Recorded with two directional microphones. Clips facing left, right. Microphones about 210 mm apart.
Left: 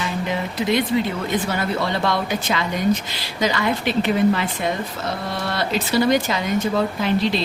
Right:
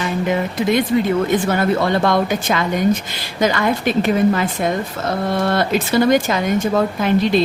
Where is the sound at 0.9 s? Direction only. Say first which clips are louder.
Right 5 dB; 50° right (ahead or behind).